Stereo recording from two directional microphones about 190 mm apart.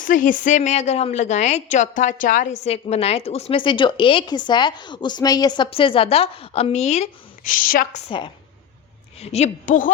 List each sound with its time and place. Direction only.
0.0 s a woman's voice: 45° left (ahead or behind)
8.0 s a woman's voice: 25° left (ahead or behind); by 9.9 s 45° left (ahead or behind)